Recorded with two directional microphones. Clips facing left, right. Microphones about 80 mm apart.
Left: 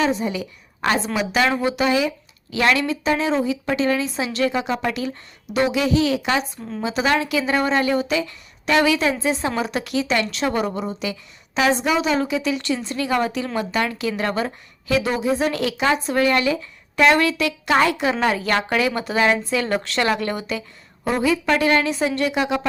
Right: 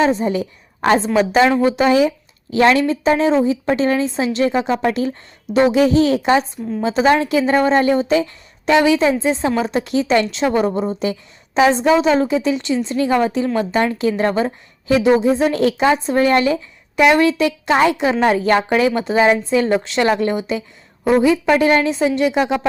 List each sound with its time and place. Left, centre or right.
0.0 s a woman's voice: right
17.0 s a woman's voice: centre